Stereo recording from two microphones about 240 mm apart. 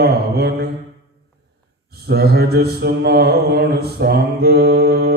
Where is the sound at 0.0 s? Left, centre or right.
Right.